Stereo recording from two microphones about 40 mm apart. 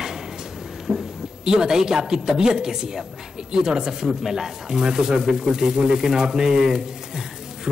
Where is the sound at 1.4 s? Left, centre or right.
Centre.